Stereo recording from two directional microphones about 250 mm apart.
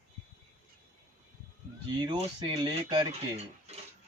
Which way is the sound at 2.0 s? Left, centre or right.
Centre.